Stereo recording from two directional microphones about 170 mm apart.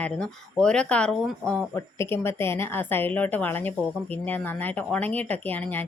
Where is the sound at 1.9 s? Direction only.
15° left (ahead or behind).